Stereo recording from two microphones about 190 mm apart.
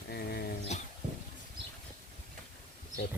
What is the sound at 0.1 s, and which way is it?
Dog, 55° left (ahead or behind).